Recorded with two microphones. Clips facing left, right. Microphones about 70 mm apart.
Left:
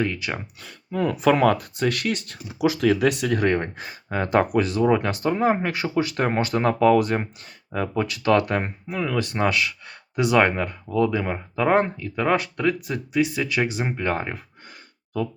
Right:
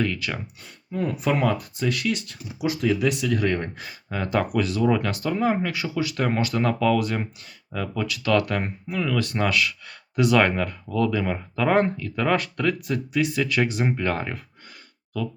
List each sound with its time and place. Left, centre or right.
0.0 s speech: left
0.6 s speech: left
2.6 s speech: left; by 14.4 s centre